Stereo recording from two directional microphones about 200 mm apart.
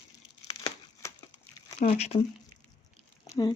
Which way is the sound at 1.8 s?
30° left (ahead or behind).